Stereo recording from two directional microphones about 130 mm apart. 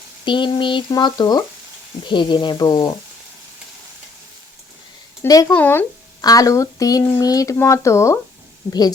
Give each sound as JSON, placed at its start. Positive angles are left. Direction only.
{"t": 0.3, "sound": "speech", "side_deg": 40}
{"t": 5.3, "sound": "speech", "side_deg": 30}
{"t": 5.5, "sound": "speech", "side_deg": 15}
{"t": 6.2, "sound": "speech", "side_deg": 25}